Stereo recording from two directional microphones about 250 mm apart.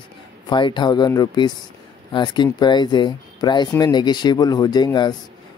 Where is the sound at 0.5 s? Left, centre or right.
Centre.